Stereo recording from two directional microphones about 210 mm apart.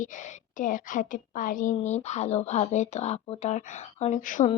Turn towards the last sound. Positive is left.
turn(degrees=40)  # may be behind; listen again after turning